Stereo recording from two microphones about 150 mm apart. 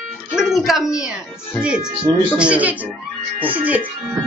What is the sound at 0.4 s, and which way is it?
Music, centre (ahead or behind).